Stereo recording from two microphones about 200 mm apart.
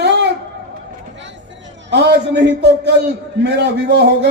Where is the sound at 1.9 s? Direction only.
60° right (ahead or behind).